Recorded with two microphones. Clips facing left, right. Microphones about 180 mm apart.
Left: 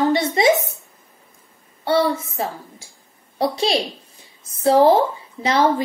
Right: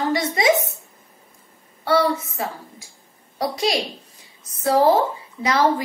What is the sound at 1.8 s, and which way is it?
A woman's voice, 25° left (ahead or behind).